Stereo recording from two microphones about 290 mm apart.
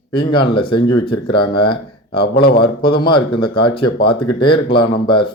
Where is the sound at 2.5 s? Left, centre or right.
Centre.